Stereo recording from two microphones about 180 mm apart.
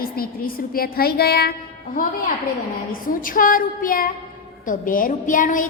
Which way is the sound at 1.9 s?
50° left (ahead or behind).